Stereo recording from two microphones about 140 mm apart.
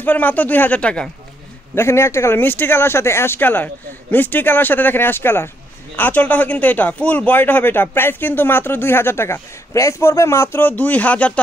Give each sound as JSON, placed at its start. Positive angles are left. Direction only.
{"t": 0.0, "sound": "speech", "side_deg": 10}
{"t": 1.8, "sound": "speech", "side_deg": 20}